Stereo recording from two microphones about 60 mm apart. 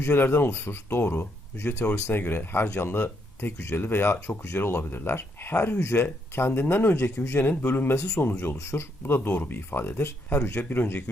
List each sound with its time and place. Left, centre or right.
0.1 s speech: left
7.3 s speech: left
7.9 s speech: left
8.2 s speech: left
8.5 s speech: left